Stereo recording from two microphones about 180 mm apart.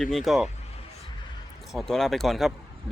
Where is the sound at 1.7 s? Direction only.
Centre (ahead or behind).